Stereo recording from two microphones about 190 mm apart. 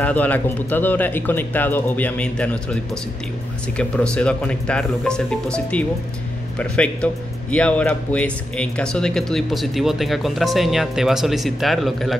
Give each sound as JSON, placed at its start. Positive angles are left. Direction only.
{"t": 0.0, "sound": "speech", "side_deg": 10}